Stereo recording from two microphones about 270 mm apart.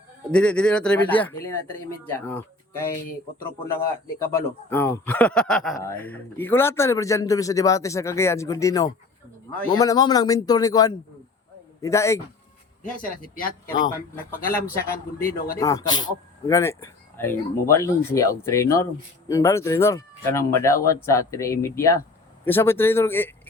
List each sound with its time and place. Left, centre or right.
0.3 s speech: centre
3.8 s speech: centre
13.0 s a man's voice: left
15.5 s speech: centre